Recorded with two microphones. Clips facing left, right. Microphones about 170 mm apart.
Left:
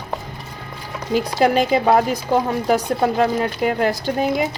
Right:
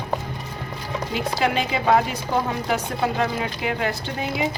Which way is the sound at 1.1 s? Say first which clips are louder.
Left 7 dB; 40° left (ahead or behind).